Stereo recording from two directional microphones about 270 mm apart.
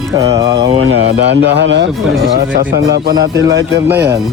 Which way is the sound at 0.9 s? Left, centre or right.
Right.